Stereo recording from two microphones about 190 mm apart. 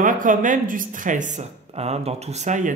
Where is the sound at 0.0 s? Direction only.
45° right (ahead or behind).